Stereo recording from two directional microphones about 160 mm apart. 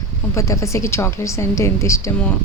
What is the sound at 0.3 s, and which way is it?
A woman's voice, 20° left (ahead or behind).